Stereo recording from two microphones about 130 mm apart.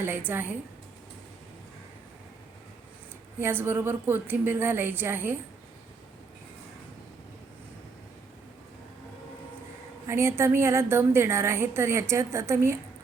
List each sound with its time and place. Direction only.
0.0 s a woman's voice: 15° right (ahead or behind)
3.3 s a woman's voice: 15° right (ahead or behind)
10.1 s a woman's voice: 20° right (ahead or behind)